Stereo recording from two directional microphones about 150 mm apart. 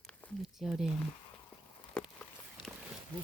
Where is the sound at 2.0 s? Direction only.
5° left (ahead or behind).